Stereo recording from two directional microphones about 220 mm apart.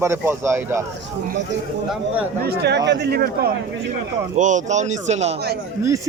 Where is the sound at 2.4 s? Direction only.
45° right (ahead or behind).